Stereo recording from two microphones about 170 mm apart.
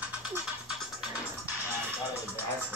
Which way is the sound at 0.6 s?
5° right (ahead or behind).